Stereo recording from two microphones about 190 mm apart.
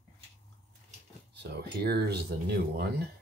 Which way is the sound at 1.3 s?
60° right (ahead or behind).